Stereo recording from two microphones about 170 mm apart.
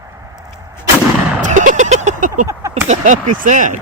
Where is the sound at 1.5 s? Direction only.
45° right (ahead or behind).